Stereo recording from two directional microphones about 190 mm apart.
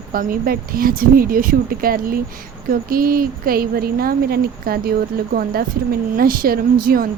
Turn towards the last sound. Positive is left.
turn(degrees=-50)  # may be behind; listen again after turning